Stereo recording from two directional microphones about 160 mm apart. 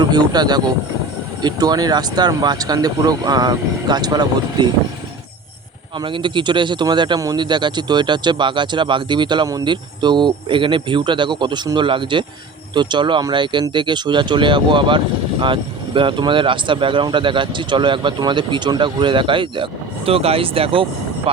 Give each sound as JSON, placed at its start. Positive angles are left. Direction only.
{"t": 0.0, "sound": "speech", "side_deg": -25}
{"t": 6.0, "sound": "speech", "side_deg": -30}